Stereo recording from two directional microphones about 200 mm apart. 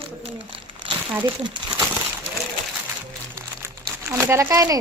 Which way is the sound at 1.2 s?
20° right (ahead or behind).